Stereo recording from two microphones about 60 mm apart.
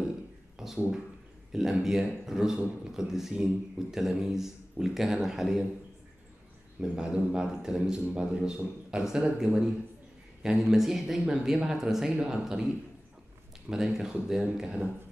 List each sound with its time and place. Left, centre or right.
0.6 s a sound: centre
1.5 s a man's voice: centre
6.8 s a man's voice: centre